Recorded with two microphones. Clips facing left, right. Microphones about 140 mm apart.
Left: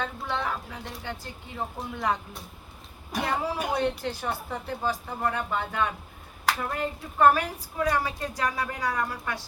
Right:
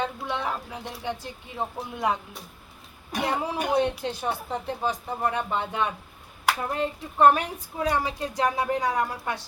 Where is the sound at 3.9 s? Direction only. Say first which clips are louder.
Right 1 dB; 20° right (ahead or behind).